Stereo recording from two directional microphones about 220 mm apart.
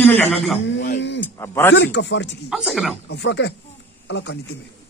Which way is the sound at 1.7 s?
50° left (ahead or behind).